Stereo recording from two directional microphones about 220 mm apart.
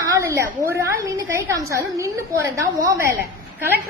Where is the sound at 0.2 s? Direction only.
15° right (ahead or behind).